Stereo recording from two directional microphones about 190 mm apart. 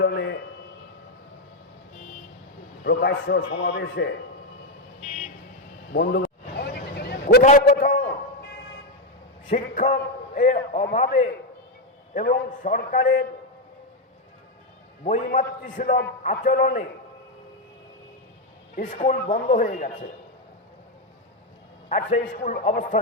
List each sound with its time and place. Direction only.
0.0 s a sound: 65° left (ahead or behind)
2.8 s a man's voice: 55° left (ahead or behind)
3.8 s a man's voice: 65° left (ahead or behind)
4.9 s vehicle: 40° left (ahead or behind)
5.9 s vehicle: 55° left (ahead or behind)
7.4 s a man's voice: 45° left (ahead or behind)
9.5 s a man's voice: 40° left (ahead or behind)
15.0 s a man's voice: 40° left (ahead or behind)
18.8 s a man's voice: 40° left (ahead or behind)
21.8 s a man's voice: 40° left (ahead or behind)